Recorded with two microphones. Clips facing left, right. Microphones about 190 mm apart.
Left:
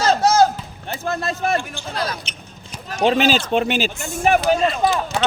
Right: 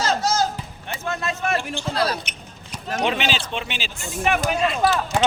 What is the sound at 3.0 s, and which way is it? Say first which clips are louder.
Speech: left 7 dB; 40° left (ahead or behind).